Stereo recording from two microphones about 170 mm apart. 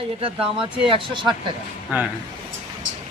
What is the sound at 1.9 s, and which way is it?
Speech, 10° right (ahead or behind).